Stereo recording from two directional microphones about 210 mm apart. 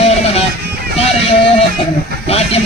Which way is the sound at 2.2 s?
30° left (ahead or behind).